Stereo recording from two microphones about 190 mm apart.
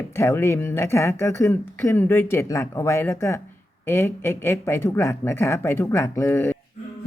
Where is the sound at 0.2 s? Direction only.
15° left (ahead or behind).